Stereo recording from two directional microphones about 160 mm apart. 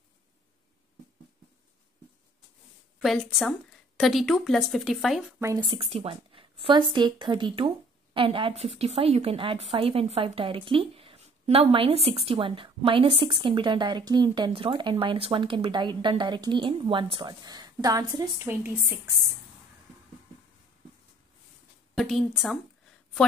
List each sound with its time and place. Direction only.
3.0 s a woman's voice: centre (ahead or behind)
5.4 s a woman's voice: 20° right (ahead or behind)
5.7 s a woman's voice: 35° right (ahead or behind); by 18.9 s 15° right (ahead or behind)
21.9 s a woman's voice: centre (ahead or behind)